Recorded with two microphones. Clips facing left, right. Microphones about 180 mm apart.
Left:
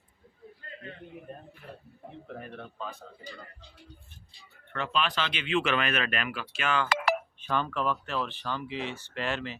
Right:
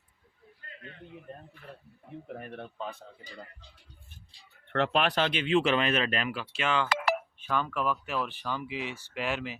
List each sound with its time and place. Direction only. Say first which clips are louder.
4.7 s speech: right 4 dB; 70° right (ahead or behind); by 6.8 s 25° right (ahead or behind)
7.4 s speech: even; 5° right (ahead or behind)